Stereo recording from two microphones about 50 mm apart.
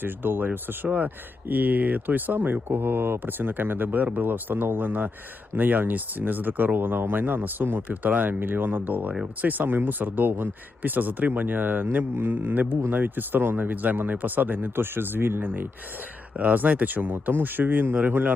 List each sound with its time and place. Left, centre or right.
0.0 s speech: right
16.4 s speech: right